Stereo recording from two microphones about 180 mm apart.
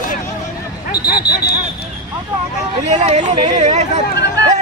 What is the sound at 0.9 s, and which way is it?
Speech, 60° left (ahead or behind).